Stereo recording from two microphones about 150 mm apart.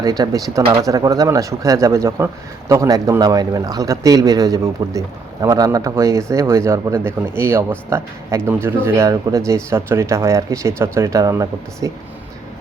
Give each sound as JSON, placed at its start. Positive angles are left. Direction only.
{"t": 0.0, "sound": "speech", "side_deg": -25}